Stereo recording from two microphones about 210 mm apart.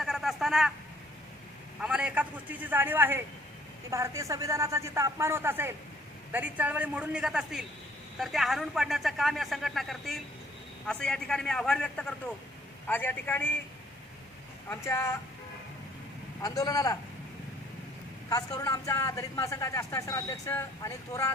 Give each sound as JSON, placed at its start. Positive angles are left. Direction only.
{"t": 0.0, "sound": "a sound", "side_deg": 0}
{"t": 1.8, "sound": "a man's voice", "side_deg": -5}
{"t": 14.7, "sound": "a man's voice", "side_deg": 10}
{"t": 16.4, "sound": "a man's voice", "side_deg": 15}
{"t": 18.3, "sound": "a man's voice", "side_deg": 15}